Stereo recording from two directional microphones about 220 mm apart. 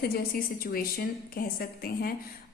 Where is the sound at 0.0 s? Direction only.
45° left (ahead or behind).